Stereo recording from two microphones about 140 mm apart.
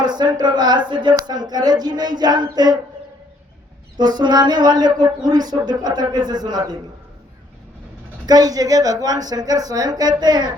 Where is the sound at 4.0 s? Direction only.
30° right (ahead or behind).